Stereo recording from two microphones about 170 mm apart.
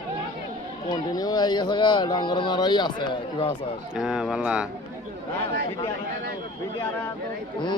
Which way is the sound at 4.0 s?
5° right (ahead or behind).